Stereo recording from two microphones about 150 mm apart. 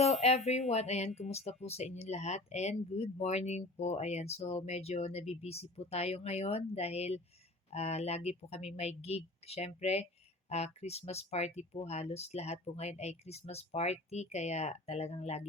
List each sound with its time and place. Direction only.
0.0 s speech: 45° left (ahead or behind)